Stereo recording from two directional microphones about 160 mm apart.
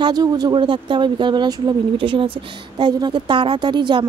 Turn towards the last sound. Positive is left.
turn(degrees=-30)  # may be behind; listen again after turning